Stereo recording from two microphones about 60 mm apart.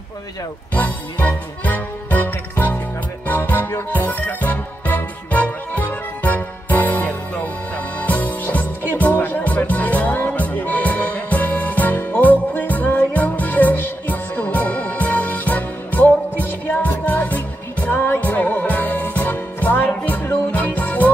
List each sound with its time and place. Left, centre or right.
0.7 s music: left
17.9 s music: left